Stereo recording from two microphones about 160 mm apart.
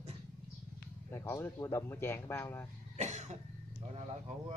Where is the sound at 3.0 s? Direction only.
45° right (ahead or behind).